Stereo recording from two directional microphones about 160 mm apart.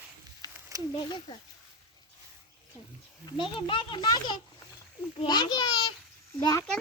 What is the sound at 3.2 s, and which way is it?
A child's voice, 30° left (ahead or behind).